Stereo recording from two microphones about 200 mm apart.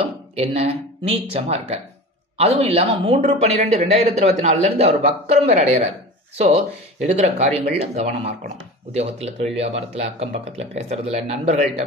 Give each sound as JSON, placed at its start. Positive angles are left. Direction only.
{"t": 0.4, "sound": "speech", "side_deg": -30}